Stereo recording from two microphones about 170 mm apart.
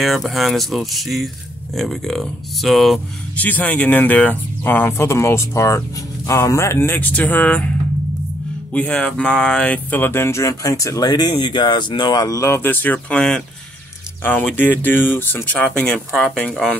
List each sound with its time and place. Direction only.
0.0 s speech: centre (ahead or behind)
8.7 s speech: 5° left (ahead or behind)